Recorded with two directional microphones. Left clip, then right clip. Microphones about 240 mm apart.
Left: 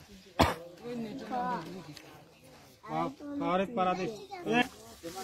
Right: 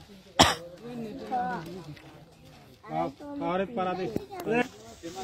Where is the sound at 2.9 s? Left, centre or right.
Left.